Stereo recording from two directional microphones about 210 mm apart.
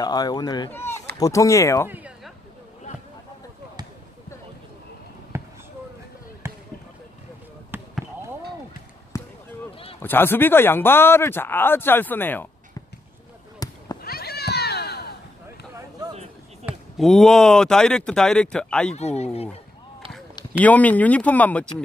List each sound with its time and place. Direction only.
0.0 s speech: 20° left (ahead or behind)
1.9 s a sound: 5° right (ahead or behind)
5.3 s basketball bounce: 10° right (ahead or behind)
7.7 s basketball bounce: 10° right (ahead or behind)
9.1 s basketball bounce: 15° left (ahead or behind)
9.9 s speech: 10° left (ahead or behind)
13.6 s a sound: 15° left (ahead or behind)
14.0 s a sound: 45° left (ahead or behind)
16.6 s speech: centre (ahead or behind)
18.9 s speech: 30° left (ahead or behind)
20.6 s speech: 5° left (ahead or behind)